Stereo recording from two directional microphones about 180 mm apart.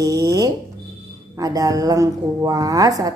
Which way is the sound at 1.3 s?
20° right (ahead or behind).